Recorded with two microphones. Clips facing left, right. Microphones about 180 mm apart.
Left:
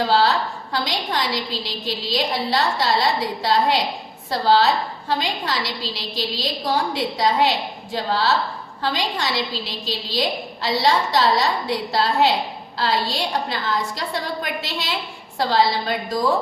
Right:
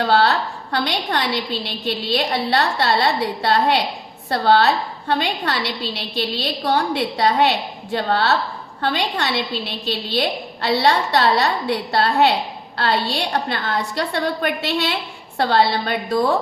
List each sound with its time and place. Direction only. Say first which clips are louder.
0.1 s a woman's voice: right 1 dB; 60° right (ahead or behind)